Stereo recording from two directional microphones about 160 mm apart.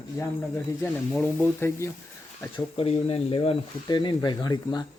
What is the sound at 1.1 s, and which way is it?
Speech, 10° left (ahead or behind).